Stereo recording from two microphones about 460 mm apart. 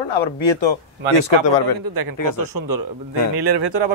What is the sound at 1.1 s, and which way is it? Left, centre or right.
Speech, left.